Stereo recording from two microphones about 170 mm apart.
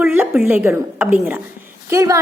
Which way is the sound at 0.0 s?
10° right (ahead or behind).